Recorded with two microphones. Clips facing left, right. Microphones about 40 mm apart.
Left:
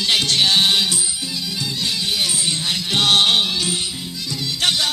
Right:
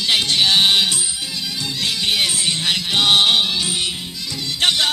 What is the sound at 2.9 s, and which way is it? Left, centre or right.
Music, centre.